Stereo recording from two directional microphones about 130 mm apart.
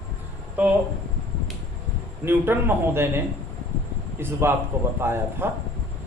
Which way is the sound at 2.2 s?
15° right (ahead or behind).